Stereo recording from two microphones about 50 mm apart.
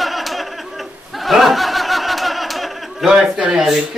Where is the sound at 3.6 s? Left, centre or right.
Centre.